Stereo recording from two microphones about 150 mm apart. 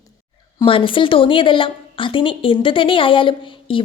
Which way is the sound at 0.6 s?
35° left (ahead or behind).